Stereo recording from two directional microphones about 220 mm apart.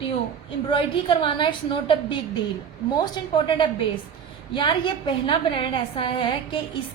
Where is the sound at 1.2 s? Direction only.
20° left (ahead or behind).